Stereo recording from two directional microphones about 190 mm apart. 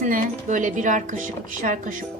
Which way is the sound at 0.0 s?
40° right (ahead or behind).